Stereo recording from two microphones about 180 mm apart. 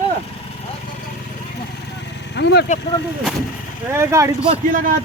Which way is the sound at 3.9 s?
15° right (ahead or behind).